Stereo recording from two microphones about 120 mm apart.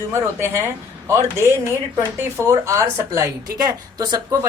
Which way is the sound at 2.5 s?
25° right (ahead or behind).